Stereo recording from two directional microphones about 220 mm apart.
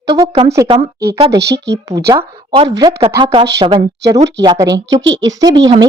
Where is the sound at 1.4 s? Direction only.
50° right (ahead or behind).